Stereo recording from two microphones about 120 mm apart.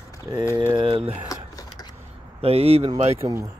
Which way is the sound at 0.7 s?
45° right (ahead or behind).